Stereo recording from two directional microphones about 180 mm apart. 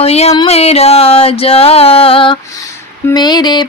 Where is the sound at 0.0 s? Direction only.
35° left (ahead or behind).